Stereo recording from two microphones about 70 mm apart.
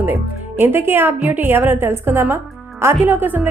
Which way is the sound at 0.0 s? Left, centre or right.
Right.